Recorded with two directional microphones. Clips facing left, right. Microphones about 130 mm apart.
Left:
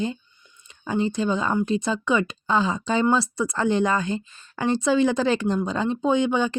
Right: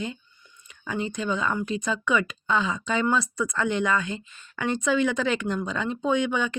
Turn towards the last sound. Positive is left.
turn(degrees=30)  # may be behind; listen again after turning